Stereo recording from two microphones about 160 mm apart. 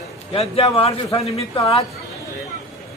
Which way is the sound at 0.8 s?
40° left (ahead or behind).